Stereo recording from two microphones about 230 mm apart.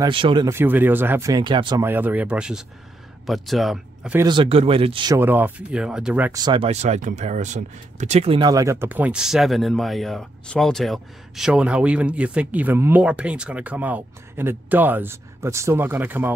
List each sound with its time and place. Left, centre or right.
0.0 s speech: right
1.9 s speech: centre
4.3 s speech: right; by 6.4 s centre
6.4 s speech: right